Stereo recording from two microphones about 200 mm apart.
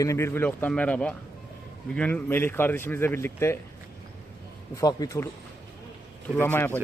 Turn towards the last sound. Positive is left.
turn(degrees=10)  # may be behind; listen again after turning